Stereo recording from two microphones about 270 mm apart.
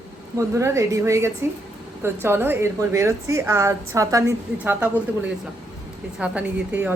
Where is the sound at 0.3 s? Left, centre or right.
Centre.